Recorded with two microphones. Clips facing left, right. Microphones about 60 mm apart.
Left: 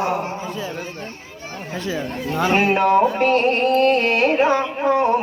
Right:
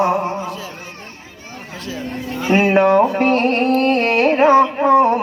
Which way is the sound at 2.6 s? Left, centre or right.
Right.